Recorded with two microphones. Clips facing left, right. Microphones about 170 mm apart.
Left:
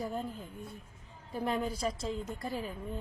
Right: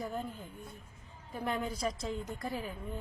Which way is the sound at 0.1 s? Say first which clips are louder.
Left 1 dB; centre (ahead or behind).